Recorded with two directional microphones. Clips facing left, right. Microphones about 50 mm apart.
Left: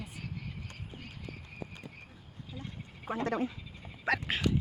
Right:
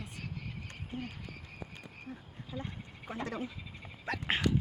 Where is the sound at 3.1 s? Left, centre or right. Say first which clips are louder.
Left 6 dB; left.